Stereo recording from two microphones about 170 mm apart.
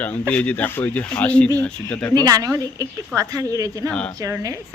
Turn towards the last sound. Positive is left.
turn(degrees=-20)  # may be behind; listen again after turning